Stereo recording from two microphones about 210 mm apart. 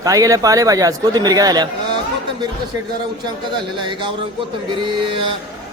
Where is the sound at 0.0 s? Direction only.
15° right (ahead or behind).